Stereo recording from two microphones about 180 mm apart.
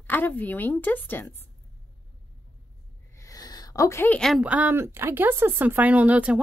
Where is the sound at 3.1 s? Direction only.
20° left (ahead or behind).